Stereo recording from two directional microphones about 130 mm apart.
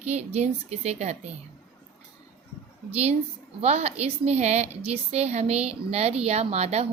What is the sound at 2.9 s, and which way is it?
A woman's voice, 55° right (ahead or behind).